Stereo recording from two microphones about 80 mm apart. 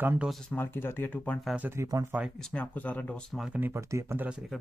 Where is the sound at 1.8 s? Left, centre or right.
Right.